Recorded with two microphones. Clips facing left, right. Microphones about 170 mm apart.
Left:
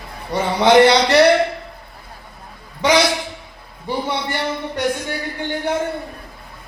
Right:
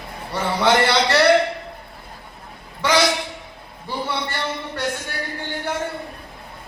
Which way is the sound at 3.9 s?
15° left (ahead or behind).